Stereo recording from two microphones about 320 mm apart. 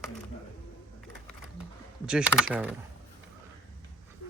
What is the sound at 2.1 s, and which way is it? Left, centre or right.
Speech, centre.